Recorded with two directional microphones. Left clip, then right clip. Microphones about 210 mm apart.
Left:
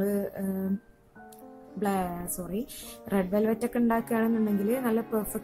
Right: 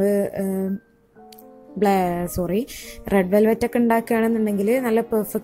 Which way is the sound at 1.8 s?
25° right (ahead or behind).